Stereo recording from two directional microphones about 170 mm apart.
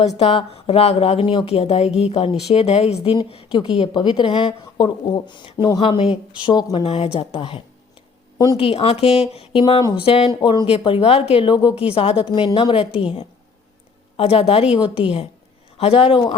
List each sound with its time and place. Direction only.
0.2 s a woman's voice: 35° left (ahead or behind)
6.8 s a woman's voice: 35° left (ahead or behind)
14.2 s a woman's voice: 35° left (ahead or behind)